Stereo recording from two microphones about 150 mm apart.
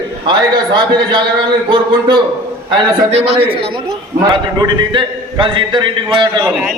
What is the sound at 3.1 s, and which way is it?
A man's voice, 45° right (ahead or behind).